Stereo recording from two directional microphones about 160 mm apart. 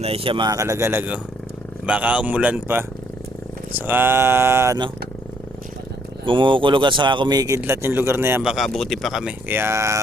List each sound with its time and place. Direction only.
0.0 s a man's voice: 35° right (ahead or behind); by 4.8 s 15° right (ahead or behind)
6.2 s a man's voice: 30° right (ahead or behind)